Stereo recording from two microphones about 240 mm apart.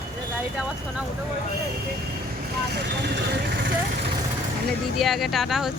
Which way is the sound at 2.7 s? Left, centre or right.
Right.